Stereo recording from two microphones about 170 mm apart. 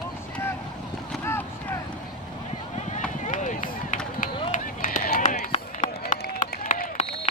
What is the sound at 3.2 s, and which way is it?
Run, 45° left (ahead or behind).